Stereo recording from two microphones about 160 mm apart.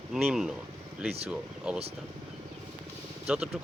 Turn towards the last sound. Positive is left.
turn(degrees=-5)  # may be behind; listen again after turning